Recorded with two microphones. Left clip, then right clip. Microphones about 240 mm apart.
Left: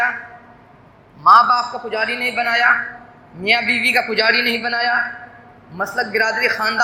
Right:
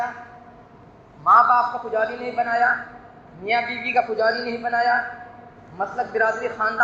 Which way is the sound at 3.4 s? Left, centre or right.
Left.